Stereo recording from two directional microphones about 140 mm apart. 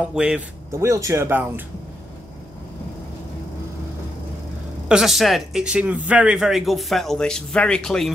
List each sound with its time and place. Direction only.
0.1 s speech: 5° right (ahead or behind)
0.7 s speech: 20° right (ahead or behind)
4.8 s speech: 5° right (ahead or behind)